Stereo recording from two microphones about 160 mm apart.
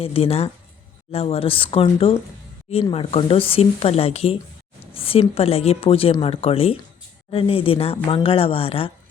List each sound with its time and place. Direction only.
0.0 s speech: 40° left (ahead or behind)
4.9 s a sound: 35° left (ahead or behind)
5.3 s speech: 40° left (ahead or behind)